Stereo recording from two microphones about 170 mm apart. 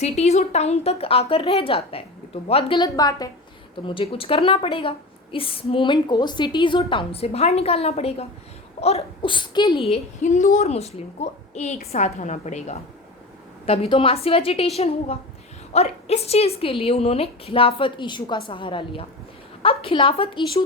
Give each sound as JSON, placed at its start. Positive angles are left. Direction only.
{"t": 0.0, "sound": "a woman's voice", "side_deg": 40}